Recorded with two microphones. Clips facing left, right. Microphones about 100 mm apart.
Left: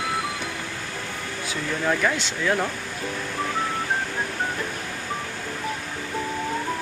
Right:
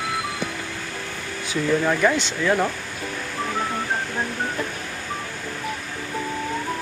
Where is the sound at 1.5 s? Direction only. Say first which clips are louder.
Right 5 dB; centre (ahead or behind).